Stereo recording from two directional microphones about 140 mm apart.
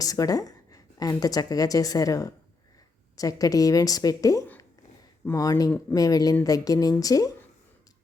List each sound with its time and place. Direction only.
0.0 s a woman's voice: 25° left (ahead or behind)